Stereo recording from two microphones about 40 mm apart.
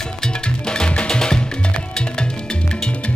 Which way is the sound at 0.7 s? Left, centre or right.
Left.